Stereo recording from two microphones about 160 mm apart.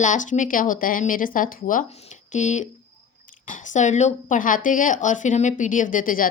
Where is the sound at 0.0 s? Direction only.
50° left (ahead or behind).